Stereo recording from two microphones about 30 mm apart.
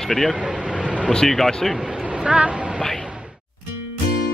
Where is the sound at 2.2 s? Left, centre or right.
Right.